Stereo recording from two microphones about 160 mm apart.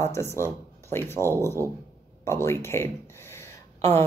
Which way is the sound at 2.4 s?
15° left (ahead or behind).